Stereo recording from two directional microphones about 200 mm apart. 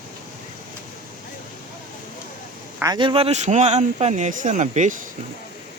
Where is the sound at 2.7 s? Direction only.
20° right (ahead or behind); by 5.0 s 35° right (ahead or behind).